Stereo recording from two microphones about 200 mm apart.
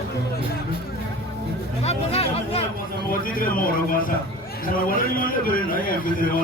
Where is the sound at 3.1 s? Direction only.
45° left (ahead or behind).